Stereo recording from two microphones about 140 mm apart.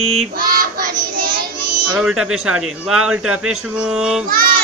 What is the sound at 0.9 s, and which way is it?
Child singing, 90° right.